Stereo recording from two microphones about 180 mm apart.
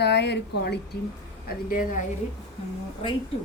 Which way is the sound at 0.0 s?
70° left (ahead or behind).